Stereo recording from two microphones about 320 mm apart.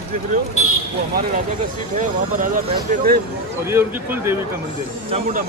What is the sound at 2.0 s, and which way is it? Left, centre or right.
Speech, right.